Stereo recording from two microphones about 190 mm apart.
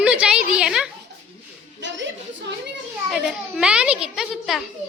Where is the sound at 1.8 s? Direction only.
70° right (ahead or behind).